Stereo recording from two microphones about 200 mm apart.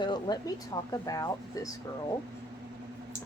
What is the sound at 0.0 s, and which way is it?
Speech, 20° left (ahead or behind).